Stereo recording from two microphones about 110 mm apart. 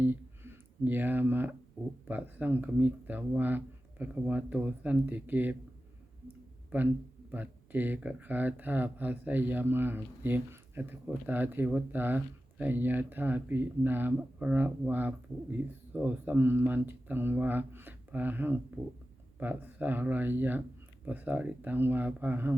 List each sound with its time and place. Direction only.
0.0 s a sound: 20° right (ahead or behind)
2.0 s speech: 15° right (ahead or behind)
6.7 s speech: 15° right (ahead or behind)